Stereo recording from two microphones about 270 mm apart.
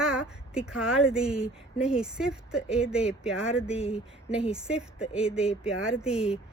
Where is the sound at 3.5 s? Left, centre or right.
Left.